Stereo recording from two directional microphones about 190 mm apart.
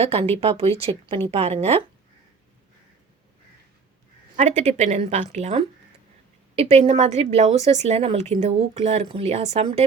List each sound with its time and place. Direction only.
0.0 s a woman's voice: 30° right (ahead or behind)
4.4 s a woman's voice: 40° right (ahead or behind)